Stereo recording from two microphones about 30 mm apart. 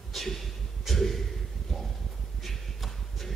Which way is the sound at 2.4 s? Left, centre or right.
Centre.